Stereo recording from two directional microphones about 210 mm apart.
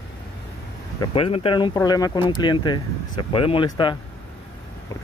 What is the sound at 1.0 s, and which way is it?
Speech, 25° left (ahead or behind).